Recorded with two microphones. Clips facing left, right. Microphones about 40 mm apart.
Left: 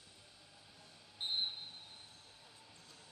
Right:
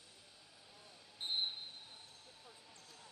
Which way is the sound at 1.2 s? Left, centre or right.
Left.